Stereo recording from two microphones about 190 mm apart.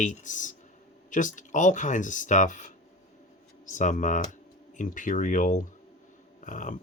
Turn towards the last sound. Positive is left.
turn(degrees=40)  # may be behind; listen again after turning